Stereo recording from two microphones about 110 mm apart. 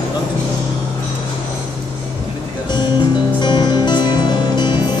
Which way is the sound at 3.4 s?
40° left (ahead or behind).